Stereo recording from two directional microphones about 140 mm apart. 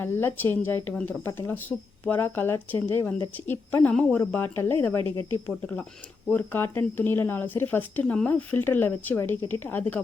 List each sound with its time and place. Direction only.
0.0 s speech: 15° left (ahead or behind)